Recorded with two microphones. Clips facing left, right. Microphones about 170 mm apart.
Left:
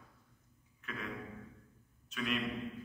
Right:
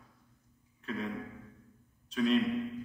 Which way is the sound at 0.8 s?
35° right (ahead or behind).